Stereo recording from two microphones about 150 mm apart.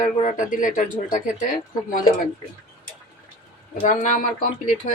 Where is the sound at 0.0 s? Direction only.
55° left (ahead or behind).